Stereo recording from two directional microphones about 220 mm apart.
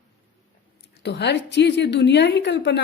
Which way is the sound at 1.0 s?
50° left (ahead or behind).